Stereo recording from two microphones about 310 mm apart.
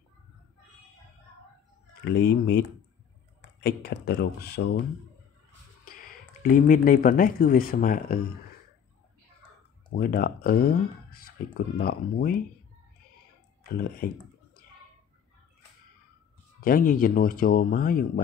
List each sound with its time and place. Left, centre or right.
2.0 s speech: left
3.6 s speech: left
6.4 s speech: left
9.9 s speech: left
13.7 s speech: left
16.6 s speech: left